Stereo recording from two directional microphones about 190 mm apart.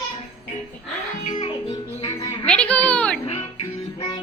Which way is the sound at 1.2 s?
40° left (ahead or behind).